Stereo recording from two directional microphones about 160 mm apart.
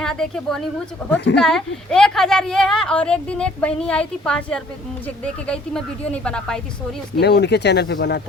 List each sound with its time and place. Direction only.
0.0 s a woman's voice: 5° left (ahead or behind)
7.2 s speech: 90° left